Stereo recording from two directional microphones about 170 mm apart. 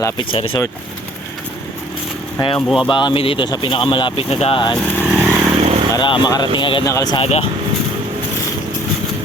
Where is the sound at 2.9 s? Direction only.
30° left (ahead or behind).